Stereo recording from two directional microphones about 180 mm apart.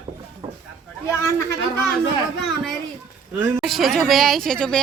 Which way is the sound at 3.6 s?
Centre (ahead or behind).